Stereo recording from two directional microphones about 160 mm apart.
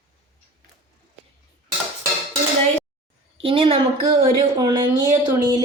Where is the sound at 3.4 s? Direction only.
35° right (ahead or behind).